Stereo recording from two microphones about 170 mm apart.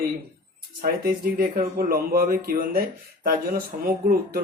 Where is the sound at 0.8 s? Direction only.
60° right (ahead or behind).